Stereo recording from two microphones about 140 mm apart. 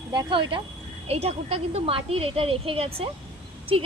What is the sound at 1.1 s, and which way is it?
A woman's voice, 45° right (ahead or behind).